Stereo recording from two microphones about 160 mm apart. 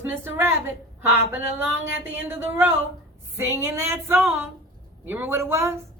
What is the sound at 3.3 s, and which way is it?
Female singing, 15° right (ahead or behind).